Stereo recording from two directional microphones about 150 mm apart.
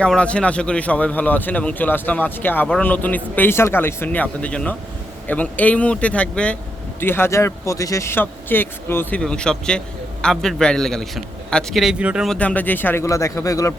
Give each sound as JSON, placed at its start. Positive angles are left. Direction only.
{"t": 0.0, "sound": "speech", "side_deg": 5}
{"t": 12.4, "sound": "a man's voice", "side_deg": 10}